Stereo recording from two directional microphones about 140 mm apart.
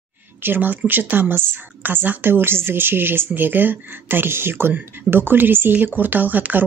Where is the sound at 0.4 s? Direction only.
15° right (ahead or behind).